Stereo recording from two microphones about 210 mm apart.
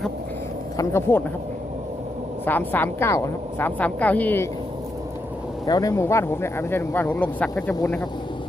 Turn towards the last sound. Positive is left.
turn(degrees=5)  # may be behind; listen again after turning